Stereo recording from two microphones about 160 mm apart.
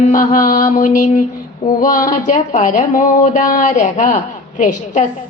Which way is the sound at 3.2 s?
55° left (ahead or behind).